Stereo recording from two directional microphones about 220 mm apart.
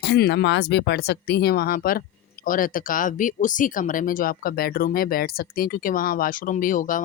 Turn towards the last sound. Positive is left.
turn(degrees=35)  # may be behind; listen again after turning